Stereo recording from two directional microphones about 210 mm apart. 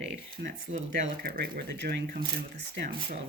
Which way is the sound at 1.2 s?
45° right (ahead or behind).